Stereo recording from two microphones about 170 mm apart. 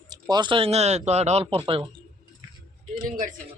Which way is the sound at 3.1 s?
55° right (ahead or behind).